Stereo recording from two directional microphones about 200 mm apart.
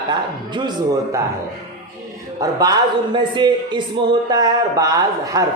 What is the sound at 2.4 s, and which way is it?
Speech, 20° right (ahead or behind).